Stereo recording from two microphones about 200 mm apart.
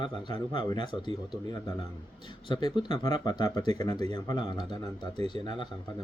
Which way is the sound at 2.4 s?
20° left (ahead or behind).